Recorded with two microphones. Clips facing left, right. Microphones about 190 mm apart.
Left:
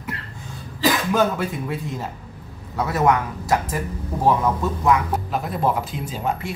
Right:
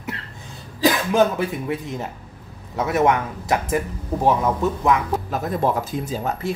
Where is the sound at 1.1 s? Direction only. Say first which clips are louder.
Right 2 dB; 20° right (ahead or behind).